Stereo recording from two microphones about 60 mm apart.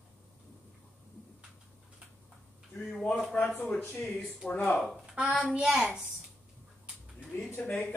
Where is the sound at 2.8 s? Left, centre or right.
Centre.